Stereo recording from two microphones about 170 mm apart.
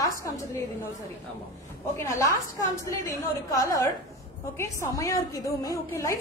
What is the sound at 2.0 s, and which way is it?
Speech, 15° left (ahead or behind).